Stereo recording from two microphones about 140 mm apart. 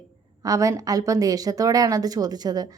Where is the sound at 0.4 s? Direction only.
25° right (ahead or behind).